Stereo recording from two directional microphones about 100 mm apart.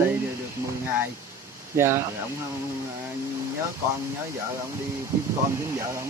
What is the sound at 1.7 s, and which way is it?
Speech, 25° right (ahead or behind).